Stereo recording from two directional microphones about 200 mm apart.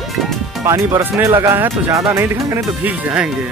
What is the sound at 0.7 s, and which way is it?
Speech, 15° right (ahead or behind).